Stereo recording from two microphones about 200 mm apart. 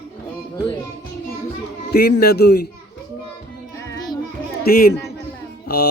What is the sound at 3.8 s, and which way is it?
Music, 15° left (ahead or behind).